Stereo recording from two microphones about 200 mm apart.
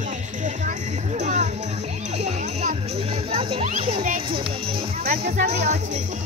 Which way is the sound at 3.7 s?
45° right (ahead or behind).